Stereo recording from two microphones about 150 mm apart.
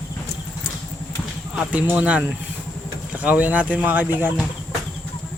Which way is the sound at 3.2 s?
10° right (ahead or behind).